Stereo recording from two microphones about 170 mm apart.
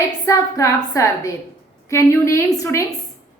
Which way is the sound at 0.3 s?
20° left (ahead or behind).